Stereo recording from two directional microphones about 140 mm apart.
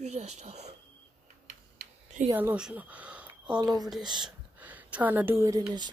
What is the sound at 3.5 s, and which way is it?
Speech, 30° right (ahead or behind).